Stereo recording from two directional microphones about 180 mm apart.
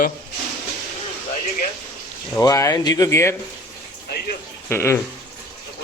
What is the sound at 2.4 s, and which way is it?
Speech, 20° left (ahead or behind).